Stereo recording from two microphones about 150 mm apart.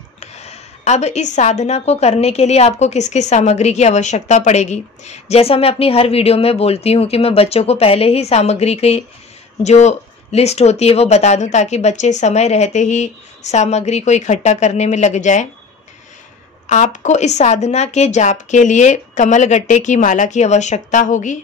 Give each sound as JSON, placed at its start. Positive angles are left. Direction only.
{"t": 0.2, "sound": "a woman's voice", "side_deg": 45}
{"t": 16.6, "sound": "a woman's voice", "side_deg": 55}